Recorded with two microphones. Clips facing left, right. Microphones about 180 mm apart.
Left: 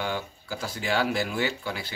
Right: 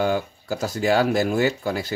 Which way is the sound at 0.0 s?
45° right (ahead or behind).